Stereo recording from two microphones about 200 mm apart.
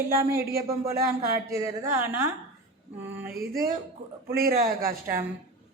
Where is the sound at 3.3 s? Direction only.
50° right (ahead or behind).